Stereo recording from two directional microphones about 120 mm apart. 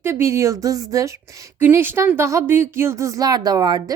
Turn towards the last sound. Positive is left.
turn(degrees=-35)  # may be behind; listen again after turning